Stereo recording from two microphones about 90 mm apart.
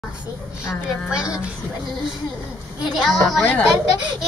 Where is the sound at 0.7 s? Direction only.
10° right (ahead or behind).